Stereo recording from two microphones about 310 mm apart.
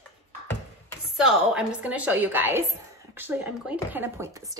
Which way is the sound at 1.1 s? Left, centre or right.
Centre.